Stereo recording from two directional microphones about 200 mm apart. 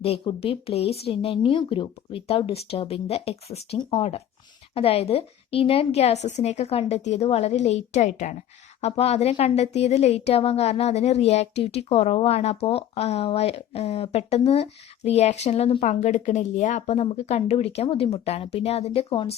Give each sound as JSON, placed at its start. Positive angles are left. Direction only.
{"t": 0.0, "sound": "speech", "side_deg": 30}